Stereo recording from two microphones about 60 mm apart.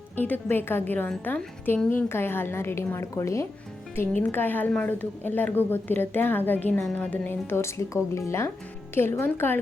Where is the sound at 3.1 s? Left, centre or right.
Left.